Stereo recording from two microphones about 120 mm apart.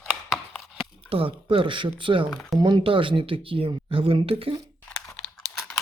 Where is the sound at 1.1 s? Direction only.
50° right (ahead or behind).